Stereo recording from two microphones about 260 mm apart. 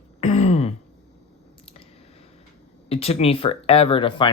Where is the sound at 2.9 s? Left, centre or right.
Left.